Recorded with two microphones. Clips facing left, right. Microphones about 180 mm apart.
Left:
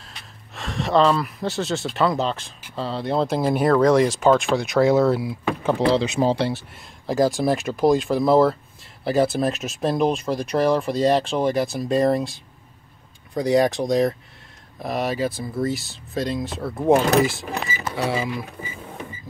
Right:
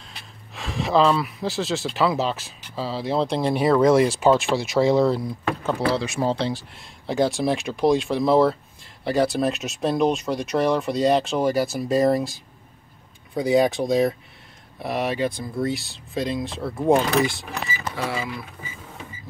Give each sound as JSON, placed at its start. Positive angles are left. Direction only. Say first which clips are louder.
{"t": 0.0, "sound": "speech", "louder": "even", "side_deg": 0}
{"t": 5.7, "sound": "speech", "louder": "left 5 dB", "side_deg": 20}
{"t": 7.1, "sound": "speech", "louder": "left 2 dB", "side_deg": 0}